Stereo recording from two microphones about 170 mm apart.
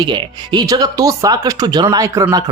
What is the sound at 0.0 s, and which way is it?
Speech, 25° right (ahead or behind).